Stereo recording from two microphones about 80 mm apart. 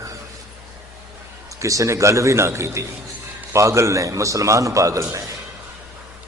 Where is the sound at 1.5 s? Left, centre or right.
Right.